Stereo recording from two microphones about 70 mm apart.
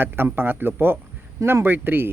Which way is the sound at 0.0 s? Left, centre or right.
Right.